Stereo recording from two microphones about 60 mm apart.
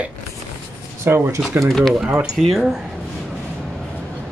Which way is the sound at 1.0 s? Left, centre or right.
Right.